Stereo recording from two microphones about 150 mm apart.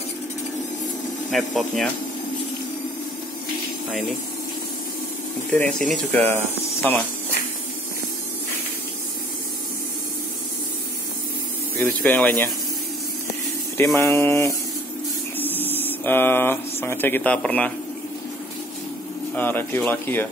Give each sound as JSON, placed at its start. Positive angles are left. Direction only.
{"t": 1.3, "sound": "speech", "side_deg": 0}
{"t": 5.7, "sound": "speech", "side_deg": 5}
{"t": 11.8, "sound": "speech", "side_deg": 10}
{"t": 13.9, "sound": "speech", "side_deg": 15}
{"t": 19.3, "sound": "speech", "side_deg": 15}